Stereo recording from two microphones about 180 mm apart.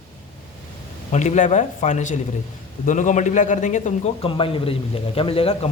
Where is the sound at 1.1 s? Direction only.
40° left (ahead or behind).